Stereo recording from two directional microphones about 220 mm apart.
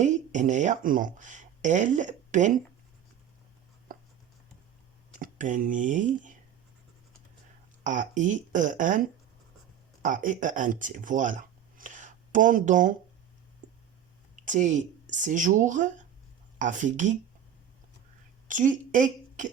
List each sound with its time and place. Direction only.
0.0 s speech: 35° right (ahead or behind)
5.2 s speech: 35° right (ahead or behind)
7.9 s speech: 35° right (ahead or behind)
10.0 s speech: 35° right (ahead or behind)
14.4 s speech: 35° right (ahead or behind)
18.4 s speech: 35° right (ahead or behind)